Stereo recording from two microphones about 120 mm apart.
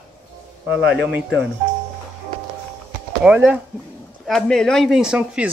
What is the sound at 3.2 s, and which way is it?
Speech, 10° right (ahead or behind).